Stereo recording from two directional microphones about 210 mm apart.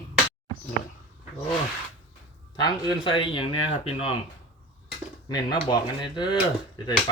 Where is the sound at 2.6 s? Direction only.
20° left (ahead or behind).